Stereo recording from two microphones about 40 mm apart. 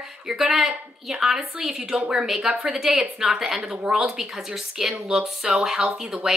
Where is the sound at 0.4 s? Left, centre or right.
Centre.